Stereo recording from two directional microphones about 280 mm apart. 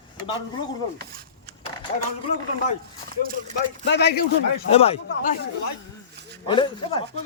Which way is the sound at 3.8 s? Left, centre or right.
Left.